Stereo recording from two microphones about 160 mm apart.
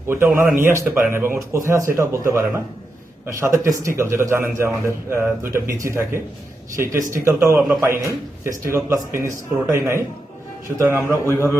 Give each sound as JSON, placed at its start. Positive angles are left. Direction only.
{"t": 0.3, "sound": "a man's voice", "side_deg": -10}
{"t": 11.3, "sound": "a man's voice", "side_deg": 15}